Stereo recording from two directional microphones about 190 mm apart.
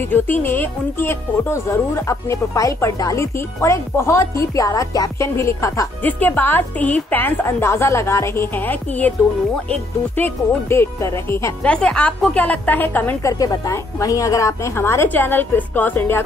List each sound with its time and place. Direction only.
0.1 s speech: 10° left (ahead or behind)